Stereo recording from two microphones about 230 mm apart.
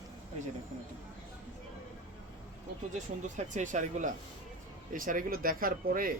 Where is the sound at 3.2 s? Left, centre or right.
Right.